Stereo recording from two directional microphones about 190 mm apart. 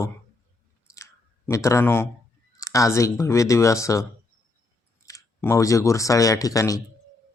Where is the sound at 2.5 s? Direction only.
15° left (ahead or behind).